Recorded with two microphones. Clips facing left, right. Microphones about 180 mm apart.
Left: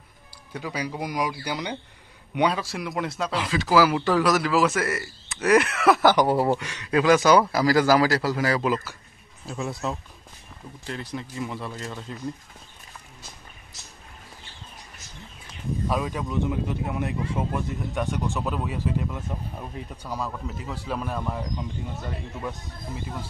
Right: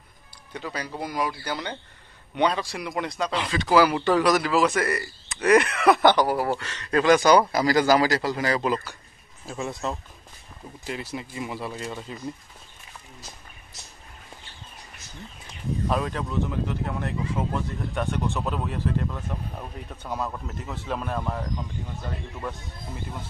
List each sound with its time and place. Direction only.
0.5 s speech: 5° left (ahead or behind)
6.1 s speech: 25° left (ahead or behind)
6.6 s speech: 10° left (ahead or behind)
15.9 s speech: 5° left (ahead or behind)
18.1 s speech: centre (ahead or behind)
20.2 s speech: 5° right (ahead or behind)